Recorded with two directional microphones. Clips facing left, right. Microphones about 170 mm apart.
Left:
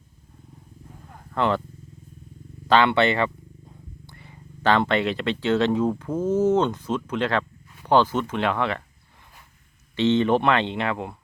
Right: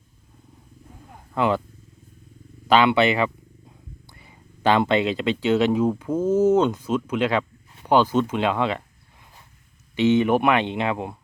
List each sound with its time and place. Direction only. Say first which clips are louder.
1.3 s speech: right 1 dB; 10° right (ahead or behind)
2.6 s speech: right 1 dB; 15° right (ahead or behind)
9.9 s speech: right 1 dB; 10° right (ahead or behind)